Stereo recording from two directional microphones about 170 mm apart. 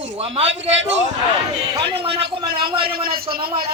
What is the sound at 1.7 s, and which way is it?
A man's voice, 30° right (ahead or behind).